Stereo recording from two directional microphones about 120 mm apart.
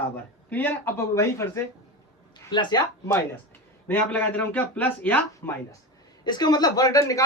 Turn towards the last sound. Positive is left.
turn(degrees=30)  # may be behind; listen again after turning